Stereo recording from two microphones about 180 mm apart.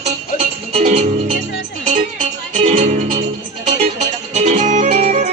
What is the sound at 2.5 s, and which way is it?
Music, 40° right (ahead or behind).